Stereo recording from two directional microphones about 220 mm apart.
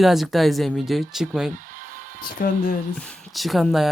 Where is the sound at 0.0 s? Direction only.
Centre (ahead or behind).